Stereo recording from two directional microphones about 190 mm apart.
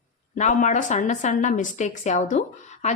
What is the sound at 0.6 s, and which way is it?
A woman's voice, 40° left (ahead or behind).